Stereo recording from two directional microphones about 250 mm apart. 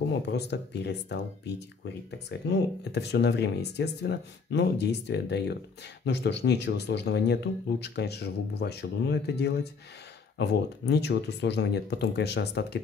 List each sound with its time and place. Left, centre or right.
0.3 s speech: left